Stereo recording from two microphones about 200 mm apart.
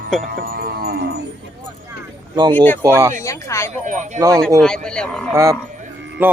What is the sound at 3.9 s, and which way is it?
Speech, 40° right (ahead or behind).